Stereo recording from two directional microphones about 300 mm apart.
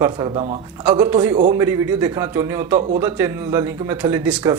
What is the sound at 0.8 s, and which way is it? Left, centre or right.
A man's voice, centre.